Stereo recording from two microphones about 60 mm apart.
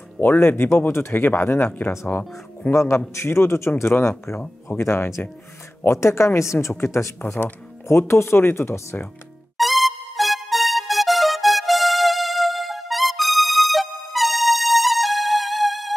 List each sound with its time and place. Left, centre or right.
0.2 s speech: left
2.7 s speech: left
8.1 s speech: left
9.6 s music: centre